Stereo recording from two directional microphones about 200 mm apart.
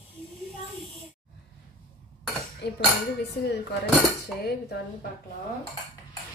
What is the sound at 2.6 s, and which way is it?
Speech, 55° left (ahead or behind).